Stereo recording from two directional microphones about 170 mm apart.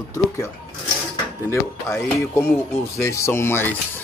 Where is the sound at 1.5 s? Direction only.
15° left (ahead or behind).